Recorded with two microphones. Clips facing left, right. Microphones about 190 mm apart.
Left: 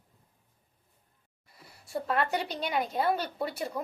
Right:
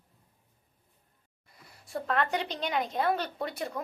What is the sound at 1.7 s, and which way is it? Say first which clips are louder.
A woman's voice: even; centre (ahead or behind).